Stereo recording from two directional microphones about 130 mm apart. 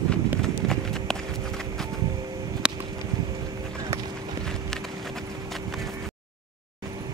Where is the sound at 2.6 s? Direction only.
5° right (ahead or behind).